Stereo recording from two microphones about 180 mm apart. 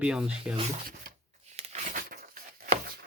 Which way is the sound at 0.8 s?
50° right (ahead or behind).